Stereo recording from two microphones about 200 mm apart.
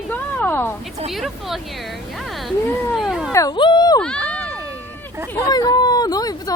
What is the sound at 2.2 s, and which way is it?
Music, centre (ahead or behind).